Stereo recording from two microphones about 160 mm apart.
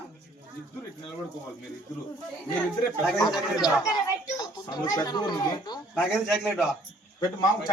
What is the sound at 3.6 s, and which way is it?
Speech, 25° left (ahead or behind).